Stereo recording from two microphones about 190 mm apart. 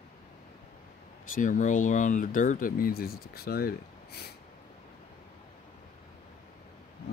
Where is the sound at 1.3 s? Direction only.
45° left (ahead or behind).